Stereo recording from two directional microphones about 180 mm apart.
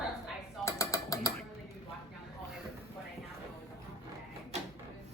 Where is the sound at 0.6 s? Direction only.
20° left (ahead or behind).